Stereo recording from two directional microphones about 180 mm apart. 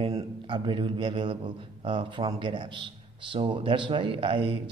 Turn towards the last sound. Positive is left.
turn(degrees=-25)  # may be behind; listen again after turning